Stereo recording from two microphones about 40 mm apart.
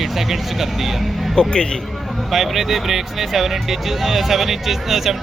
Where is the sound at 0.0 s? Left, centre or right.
Centre.